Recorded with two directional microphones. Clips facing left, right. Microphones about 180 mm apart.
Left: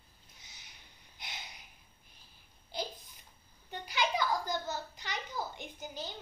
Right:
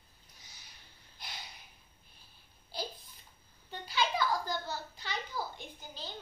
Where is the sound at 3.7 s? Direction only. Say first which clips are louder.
Even; 15° left (ahead or behind).